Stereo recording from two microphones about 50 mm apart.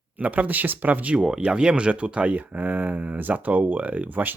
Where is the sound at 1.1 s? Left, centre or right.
Centre.